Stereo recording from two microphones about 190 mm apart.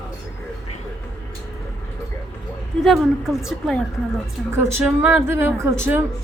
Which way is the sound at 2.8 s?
Centre (ahead or behind).